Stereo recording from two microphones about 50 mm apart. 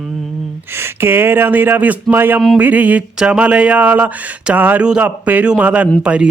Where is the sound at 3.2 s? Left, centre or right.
Right.